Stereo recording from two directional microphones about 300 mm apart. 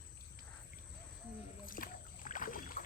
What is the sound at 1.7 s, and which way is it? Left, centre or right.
Rowboat, left.